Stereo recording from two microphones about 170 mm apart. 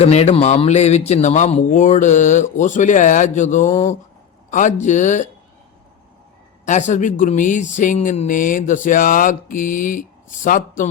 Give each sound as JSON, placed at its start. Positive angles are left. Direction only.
{"t": 0.0, "sound": "speech", "side_deg": 40}
{"t": 6.7, "sound": "speech", "side_deg": 45}